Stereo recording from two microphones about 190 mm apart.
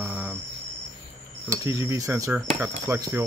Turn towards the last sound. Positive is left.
turn(degrees=-15)  # may be behind; listen again after turning